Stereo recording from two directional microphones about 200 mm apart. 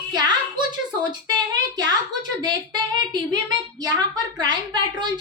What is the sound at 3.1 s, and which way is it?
A woman's voice, 20° right (ahead or behind).